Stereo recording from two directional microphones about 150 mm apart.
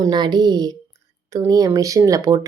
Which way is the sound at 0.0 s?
30° right (ahead or behind).